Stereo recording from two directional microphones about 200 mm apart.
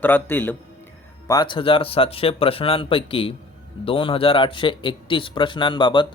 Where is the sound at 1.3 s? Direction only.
20° left (ahead or behind).